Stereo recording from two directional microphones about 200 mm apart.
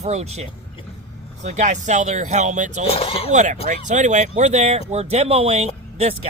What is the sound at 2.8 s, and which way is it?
Speech, 30° left (ahead or behind).